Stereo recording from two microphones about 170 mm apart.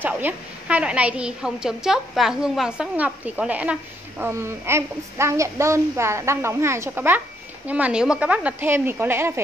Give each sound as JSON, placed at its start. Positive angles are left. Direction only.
{"t": 0.0, "sound": "a woman's voice", "side_deg": -10}